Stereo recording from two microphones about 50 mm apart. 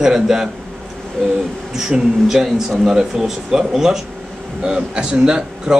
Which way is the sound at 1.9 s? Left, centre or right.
Centre.